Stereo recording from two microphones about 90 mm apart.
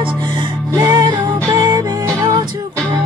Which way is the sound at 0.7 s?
40° right (ahead or behind).